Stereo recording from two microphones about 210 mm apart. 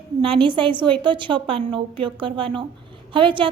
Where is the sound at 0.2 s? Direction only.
25° right (ahead or behind).